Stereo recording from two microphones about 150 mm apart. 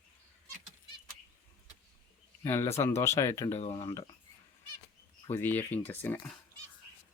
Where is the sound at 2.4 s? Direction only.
20° left (ahead or behind).